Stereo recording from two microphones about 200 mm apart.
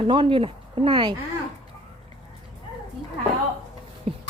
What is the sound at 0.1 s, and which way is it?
Speech, 25° right (ahead or behind).